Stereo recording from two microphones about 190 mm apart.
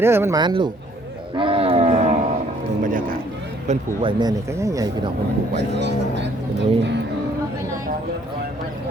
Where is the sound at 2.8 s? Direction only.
45° right (ahead or behind).